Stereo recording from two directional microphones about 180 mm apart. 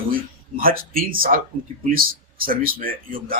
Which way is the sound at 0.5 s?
50° right (ahead or behind).